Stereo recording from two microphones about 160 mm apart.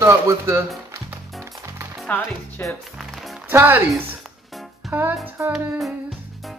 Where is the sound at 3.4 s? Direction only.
10° right (ahead or behind).